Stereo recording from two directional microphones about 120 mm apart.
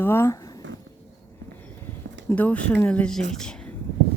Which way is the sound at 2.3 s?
10° left (ahead or behind).